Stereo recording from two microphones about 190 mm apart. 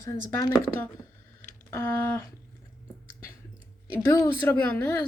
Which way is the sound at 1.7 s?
10° left (ahead or behind).